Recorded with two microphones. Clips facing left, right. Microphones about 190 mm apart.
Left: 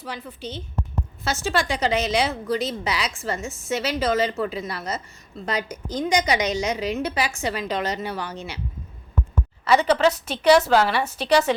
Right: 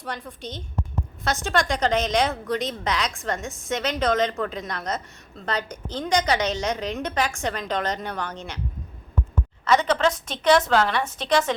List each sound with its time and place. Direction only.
0.0 s a woman's voice: 5° left (ahead or behind)
9.6 s a woman's voice: 10° left (ahead or behind)